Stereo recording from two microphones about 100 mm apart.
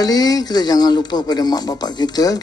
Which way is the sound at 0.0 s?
40° left (ahead or behind).